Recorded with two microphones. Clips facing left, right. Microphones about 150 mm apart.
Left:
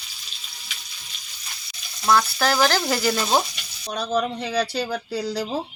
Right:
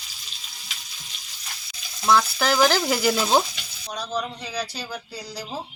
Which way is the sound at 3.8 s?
60° left (ahead or behind).